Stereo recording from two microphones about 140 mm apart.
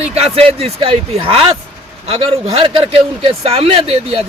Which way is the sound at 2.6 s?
40° right (ahead or behind).